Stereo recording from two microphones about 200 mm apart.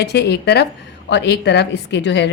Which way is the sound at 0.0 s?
55° left (ahead or behind).